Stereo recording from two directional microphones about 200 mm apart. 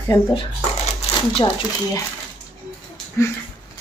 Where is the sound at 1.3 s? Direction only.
25° left (ahead or behind).